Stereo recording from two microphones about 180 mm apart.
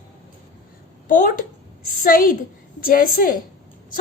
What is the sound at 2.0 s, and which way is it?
A woman's voice, 50° left (ahead or behind).